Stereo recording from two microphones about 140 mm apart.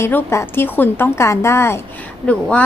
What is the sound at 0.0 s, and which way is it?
A woman's voice, 15° left (ahead or behind).